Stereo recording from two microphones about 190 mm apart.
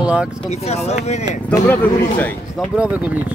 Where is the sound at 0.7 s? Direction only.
35° left (ahead or behind).